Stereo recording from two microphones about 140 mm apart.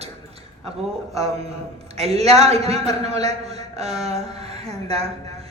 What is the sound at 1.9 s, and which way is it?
A woman's voice, 50° right (ahead or behind).